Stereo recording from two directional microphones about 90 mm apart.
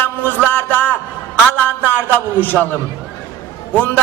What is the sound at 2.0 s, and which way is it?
Speech, 20° left (ahead or behind).